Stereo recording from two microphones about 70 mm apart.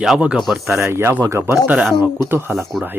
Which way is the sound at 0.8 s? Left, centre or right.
Right.